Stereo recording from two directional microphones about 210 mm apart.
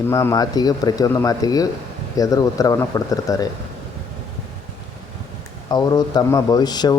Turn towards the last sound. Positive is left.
turn(degrees=20)  # may be behind; listen again after turning